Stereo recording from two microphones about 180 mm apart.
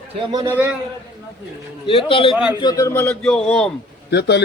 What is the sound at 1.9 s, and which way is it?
A man's voice, 30° left (ahead or behind).